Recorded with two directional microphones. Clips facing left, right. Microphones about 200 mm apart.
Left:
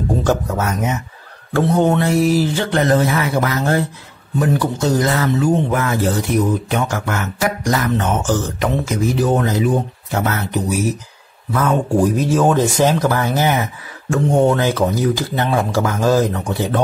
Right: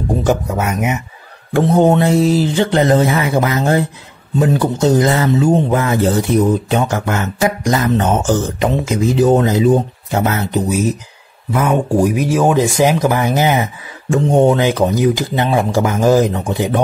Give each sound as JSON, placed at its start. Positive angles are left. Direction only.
{"t": 0.2, "sound": "speech", "side_deg": -15}